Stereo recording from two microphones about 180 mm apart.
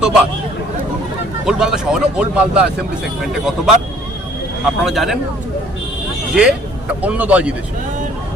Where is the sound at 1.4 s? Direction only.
5° right (ahead or behind).